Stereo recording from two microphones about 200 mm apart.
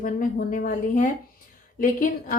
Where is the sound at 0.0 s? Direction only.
45° left (ahead or behind).